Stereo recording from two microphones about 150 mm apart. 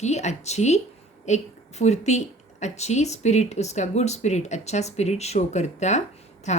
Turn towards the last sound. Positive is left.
turn(degrees=50)  # may be behind; listen again after turning